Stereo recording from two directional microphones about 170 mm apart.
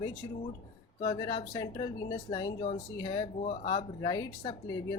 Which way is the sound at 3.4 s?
35° left (ahead or behind).